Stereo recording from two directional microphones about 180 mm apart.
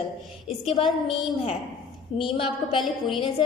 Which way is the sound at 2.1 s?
35° left (ahead or behind).